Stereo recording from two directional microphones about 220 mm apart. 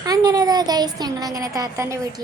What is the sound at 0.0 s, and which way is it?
A woman's voice, 15° right (ahead or behind).